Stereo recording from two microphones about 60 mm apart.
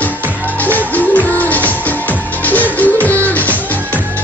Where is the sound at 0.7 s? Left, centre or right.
Left.